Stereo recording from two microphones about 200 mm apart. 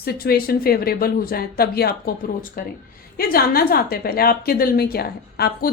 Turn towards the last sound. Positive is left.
turn(degrees=50)  # may be behind; listen again after turning